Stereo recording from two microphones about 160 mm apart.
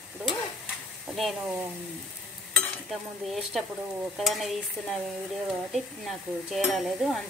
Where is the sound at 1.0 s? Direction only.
Centre (ahead or behind).